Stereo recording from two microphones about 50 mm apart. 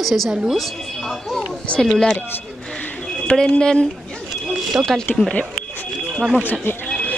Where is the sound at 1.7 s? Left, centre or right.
Left.